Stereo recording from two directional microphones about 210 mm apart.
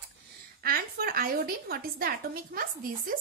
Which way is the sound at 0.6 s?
45° right (ahead or behind).